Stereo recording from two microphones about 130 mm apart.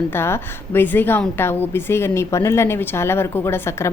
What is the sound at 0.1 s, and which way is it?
A woman's voice, 20° left (ahead or behind).